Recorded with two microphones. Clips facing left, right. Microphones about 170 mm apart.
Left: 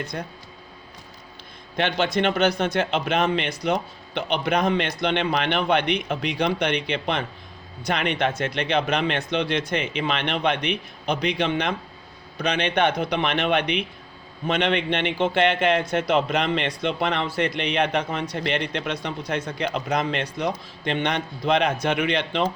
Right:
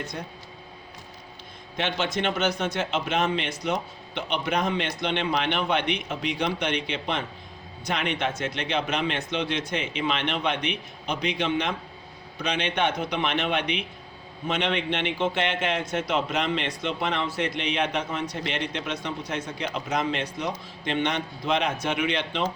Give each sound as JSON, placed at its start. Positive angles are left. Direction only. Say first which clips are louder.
{"t": 2.1, "sound": "speech", "louder": "left 6 dB", "side_deg": 65}